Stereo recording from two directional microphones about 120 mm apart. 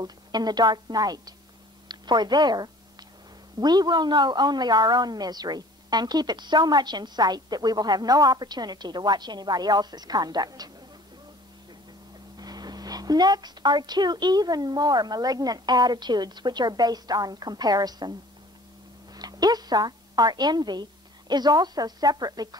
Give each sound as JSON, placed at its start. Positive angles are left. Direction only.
{"t": 0.0, "sound": "a woman's voice", "side_deg": -35}
{"t": 12.4, "sound": "a woman's voice", "side_deg": -35}
{"t": 19.1, "sound": "a woman's voice", "side_deg": -35}